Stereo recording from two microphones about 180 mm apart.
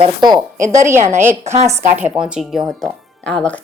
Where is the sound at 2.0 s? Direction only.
5° right (ahead or behind).